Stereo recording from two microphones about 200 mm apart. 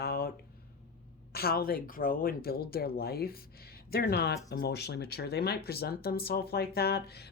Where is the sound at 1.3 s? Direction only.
50° left (ahead or behind).